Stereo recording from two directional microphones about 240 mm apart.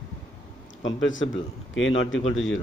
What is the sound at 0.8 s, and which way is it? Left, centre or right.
Speech, left.